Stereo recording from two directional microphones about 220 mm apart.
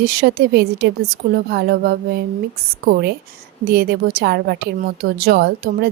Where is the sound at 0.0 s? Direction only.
45° right (ahead or behind).